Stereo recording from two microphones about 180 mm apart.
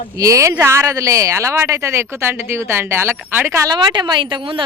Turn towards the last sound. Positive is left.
turn(degrees=-25)  # may be behind; listen again after turning